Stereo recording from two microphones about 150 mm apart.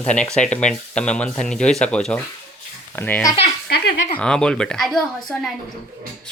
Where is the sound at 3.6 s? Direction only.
90° left.